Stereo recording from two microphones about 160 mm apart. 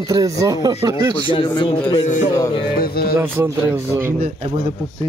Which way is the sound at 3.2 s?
15° right (ahead or behind).